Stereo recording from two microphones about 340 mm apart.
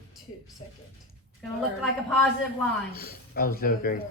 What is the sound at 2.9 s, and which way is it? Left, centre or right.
Speech, left.